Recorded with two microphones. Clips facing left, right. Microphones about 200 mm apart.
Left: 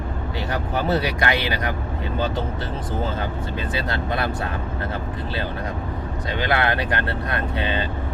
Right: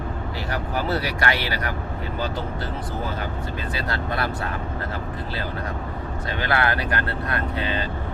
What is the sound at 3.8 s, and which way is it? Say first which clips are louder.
Speech: left 2 dB; 25° left (ahead or behind).